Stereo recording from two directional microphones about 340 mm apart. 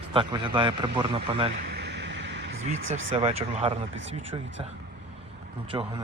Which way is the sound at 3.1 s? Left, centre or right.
Centre.